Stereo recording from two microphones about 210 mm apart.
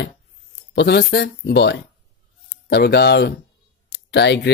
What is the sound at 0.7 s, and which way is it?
Speech, 50° left (ahead or behind).